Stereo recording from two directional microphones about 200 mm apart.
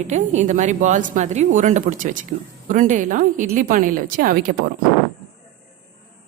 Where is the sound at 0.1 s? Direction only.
35° right (ahead or behind).